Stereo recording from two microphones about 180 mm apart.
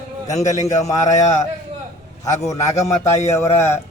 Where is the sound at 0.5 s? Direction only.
15° left (ahead or behind).